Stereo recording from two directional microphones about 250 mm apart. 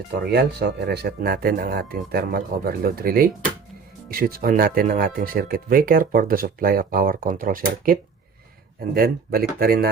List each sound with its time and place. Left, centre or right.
0.1 s speech: right